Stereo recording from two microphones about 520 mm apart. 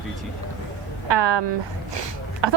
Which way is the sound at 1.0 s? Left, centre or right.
Right.